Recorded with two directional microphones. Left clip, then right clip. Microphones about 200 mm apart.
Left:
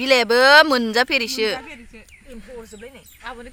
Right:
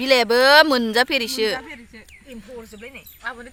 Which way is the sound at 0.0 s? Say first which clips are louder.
Left 1 dB; centre (ahead or behind).